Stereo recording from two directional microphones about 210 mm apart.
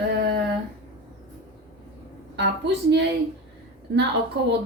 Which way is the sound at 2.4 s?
55° right (ahead or behind).